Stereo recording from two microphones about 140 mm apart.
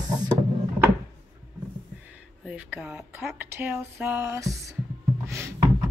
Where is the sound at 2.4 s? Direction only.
10° right (ahead or behind).